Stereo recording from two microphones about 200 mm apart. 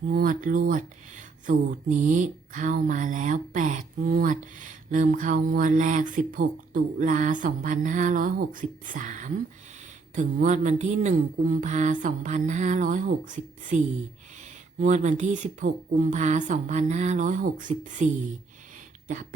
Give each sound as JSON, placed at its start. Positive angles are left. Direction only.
{"t": 0.1, "sound": "speech", "side_deg": -45}